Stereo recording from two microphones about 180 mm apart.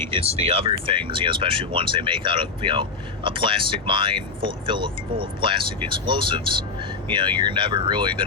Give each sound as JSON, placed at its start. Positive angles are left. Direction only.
{"t": 0.1, "sound": "speech", "side_deg": -30}